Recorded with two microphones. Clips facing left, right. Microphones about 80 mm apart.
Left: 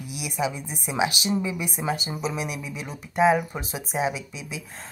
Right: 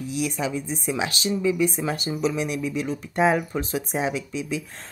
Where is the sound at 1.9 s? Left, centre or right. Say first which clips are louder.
Right 3 dB; centre.